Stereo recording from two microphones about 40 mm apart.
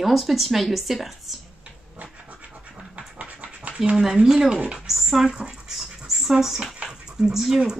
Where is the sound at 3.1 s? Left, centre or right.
Right.